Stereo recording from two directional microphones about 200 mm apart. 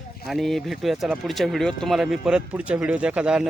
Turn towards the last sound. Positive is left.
turn(degrees=-5)  # may be behind; listen again after turning